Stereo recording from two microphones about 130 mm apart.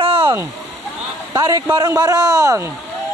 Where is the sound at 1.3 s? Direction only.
30° right (ahead or behind).